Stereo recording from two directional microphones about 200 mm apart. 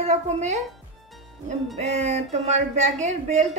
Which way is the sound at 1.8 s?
35° right (ahead or behind).